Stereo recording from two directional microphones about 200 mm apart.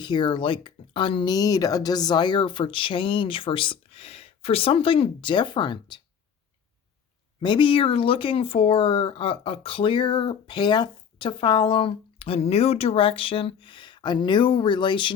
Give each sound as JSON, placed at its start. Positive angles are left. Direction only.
{"t": 0.0, "sound": "speech", "side_deg": 20}
{"t": 7.4, "sound": "speech", "side_deg": 25}